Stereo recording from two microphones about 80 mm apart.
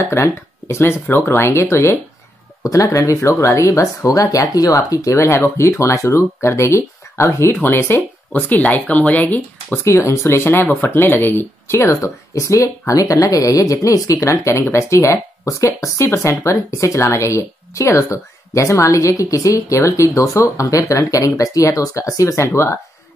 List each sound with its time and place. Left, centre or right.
0.0 s speech: left
7.5 s speech: left
9.8 s speech: left